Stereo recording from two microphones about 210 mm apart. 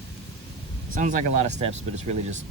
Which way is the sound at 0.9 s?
35° right (ahead or behind).